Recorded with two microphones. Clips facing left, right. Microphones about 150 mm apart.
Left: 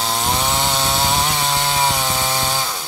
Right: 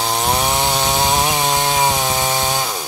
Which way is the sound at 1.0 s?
15° right (ahead or behind).